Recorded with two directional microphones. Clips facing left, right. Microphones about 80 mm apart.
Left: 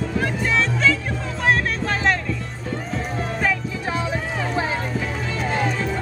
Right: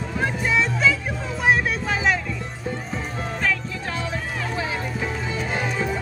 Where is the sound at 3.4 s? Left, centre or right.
Centre.